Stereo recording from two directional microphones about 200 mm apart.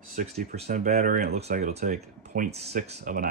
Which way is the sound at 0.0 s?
45° right (ahead or behind).